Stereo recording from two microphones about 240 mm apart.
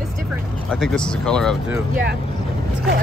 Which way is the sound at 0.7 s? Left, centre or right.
Centre.